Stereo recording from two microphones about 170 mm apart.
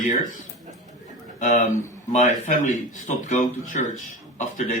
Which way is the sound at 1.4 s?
50° left (ahead or behind).